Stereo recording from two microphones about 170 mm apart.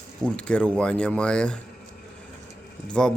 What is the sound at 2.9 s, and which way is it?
Speech, 5° left (ahead or behind).